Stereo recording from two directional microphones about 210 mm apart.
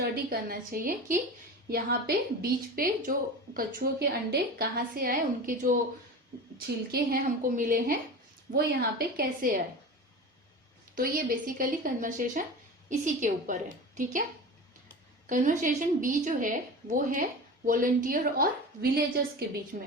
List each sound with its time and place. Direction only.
0.0 s a woman's voice: 45° right (ahead or behind)
6.9 s a woman's voice: 45° right (ahead or behind)
10.9 s a woman's voice: 45° right (ahead or behind)
15.3 s a woman's voice: 40° right (ahead or behind)